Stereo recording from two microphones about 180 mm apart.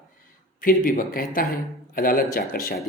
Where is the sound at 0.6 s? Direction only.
50° left (ahead or behind).